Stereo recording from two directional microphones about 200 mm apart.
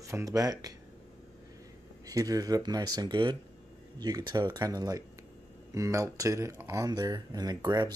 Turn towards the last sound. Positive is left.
turn(degrees=-20)  # may be behind; listen again after turning